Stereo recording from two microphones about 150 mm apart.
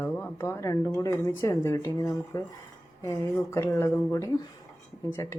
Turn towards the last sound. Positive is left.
turn(degrees=20)  # may be behind; listen again after turning